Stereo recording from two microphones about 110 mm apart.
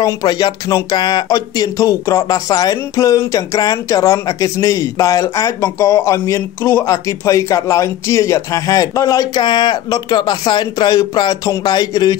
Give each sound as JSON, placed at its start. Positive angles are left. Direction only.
{"t": 0.0, "sound": "speech", "side_deg": 35}